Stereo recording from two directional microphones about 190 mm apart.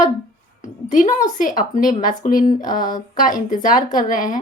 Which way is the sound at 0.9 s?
40° left (ahead or behind).